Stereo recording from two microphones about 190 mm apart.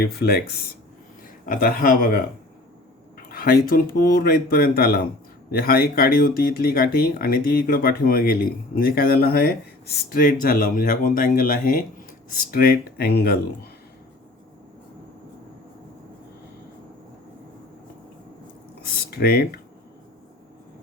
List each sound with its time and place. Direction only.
0.0 s speech: 55° left (ahead or behind)
19.1 s speech: 55° left (ahead or behind)